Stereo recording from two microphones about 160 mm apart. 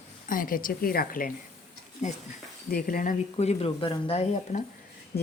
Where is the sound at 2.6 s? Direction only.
65° left (ahead or behind).